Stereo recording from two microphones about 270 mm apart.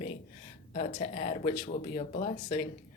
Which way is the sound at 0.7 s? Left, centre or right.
Left.